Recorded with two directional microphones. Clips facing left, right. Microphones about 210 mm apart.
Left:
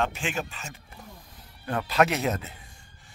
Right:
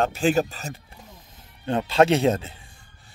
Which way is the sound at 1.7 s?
25° right (ahead or behind).